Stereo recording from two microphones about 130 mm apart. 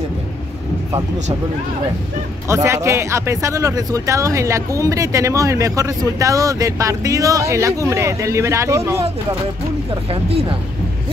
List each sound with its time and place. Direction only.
2.4 s speech: 20° right (ahead or behind)